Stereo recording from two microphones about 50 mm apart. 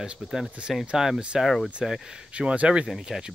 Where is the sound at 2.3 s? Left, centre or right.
Right.